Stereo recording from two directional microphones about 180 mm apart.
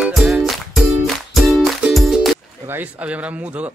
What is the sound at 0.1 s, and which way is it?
Music, centre (ahead or behind).